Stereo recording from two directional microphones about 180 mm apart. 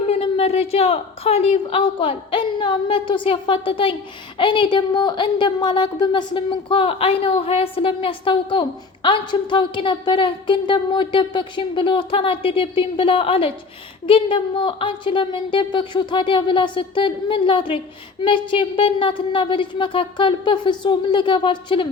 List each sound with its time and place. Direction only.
0.1 s a woman's voice: 35° left (ahead or behind)